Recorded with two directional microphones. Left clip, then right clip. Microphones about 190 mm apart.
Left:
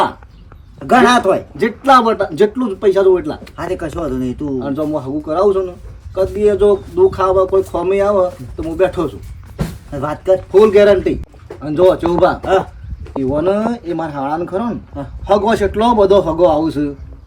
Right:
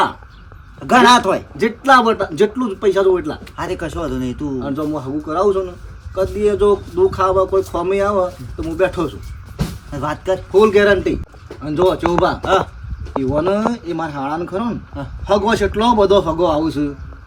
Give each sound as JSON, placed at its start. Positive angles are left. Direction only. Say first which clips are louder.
{"t": 1.2, "sound": "speech", "louder": "left 3 dB", "side_deg": 0}
{"t": 3.8, "sound": "speech", "louder": "left 2 dB", "side_deg": -15}
{"t": 4.6, "sound": "speech", "louder": "left 3 dB", "side_deg": 0}